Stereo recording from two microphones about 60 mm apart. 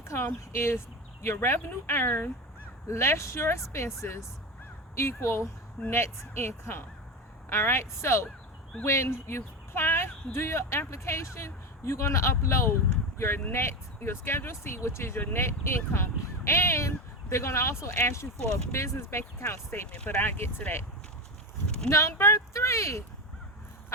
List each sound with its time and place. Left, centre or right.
0.1 s speech: left
2.8 s speech: left
21.8 s speech: left